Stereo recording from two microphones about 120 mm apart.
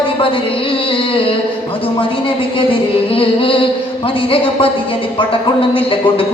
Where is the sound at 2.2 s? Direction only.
50° left (ahead or behind).